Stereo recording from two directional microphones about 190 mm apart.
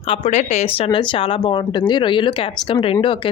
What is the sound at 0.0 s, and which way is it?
Speech, 30° left (ahead or behind).